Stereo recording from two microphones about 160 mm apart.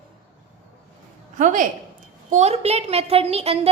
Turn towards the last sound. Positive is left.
turn(degrees=-40)  # may be behind; listen again after turning